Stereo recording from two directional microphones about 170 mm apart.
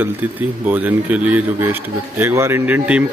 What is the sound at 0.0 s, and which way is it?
Speech, 10° right (ahead or behind).